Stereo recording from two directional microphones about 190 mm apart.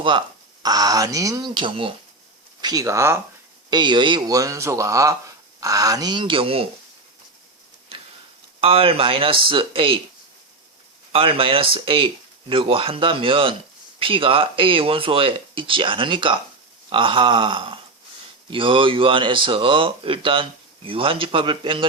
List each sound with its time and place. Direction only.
0.0 s speech: 25° right (ahead or behind)
8.6 s speech: 30° right (ahead or behind)
11.1 s speech: 30° right (ahead or behind)